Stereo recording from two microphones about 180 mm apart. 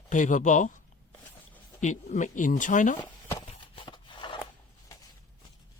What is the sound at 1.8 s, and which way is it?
Speech, 40° left (ahead or behind).